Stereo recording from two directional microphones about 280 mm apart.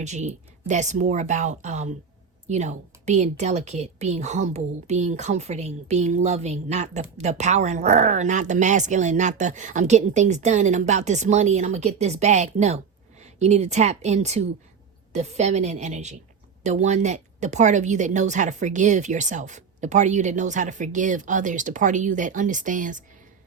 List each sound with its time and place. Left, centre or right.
0.0 s a woman's voice: right